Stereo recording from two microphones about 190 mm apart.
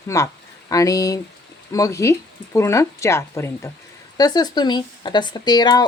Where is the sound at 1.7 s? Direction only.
15° left (ahead or behind).